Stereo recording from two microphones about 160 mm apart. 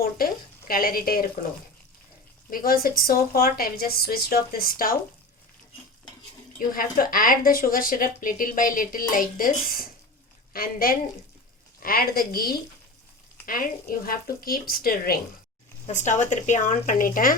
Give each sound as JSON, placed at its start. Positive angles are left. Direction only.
{"t": 0.0, "sound": "speech", "side_deg": 65}
{"t": 2.5, "sound": "speech", "side_deg": 65}
{"t": 6.6, "sound": "a woman's voice", "side_deg": 60}
{"t": 15.9, "sound": "speech", "side_deg": 50}